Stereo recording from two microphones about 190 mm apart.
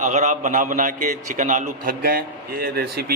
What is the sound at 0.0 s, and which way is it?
A man's voice, 40° right (ahead or behind).